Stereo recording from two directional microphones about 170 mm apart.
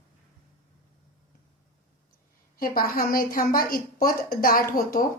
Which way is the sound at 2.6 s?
60° left (ahead or behind).